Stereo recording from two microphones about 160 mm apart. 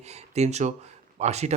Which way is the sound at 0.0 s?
45° right (ahead or behind).